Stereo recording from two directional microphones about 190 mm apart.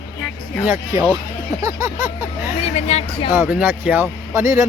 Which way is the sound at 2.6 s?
35° left (ahead or behind).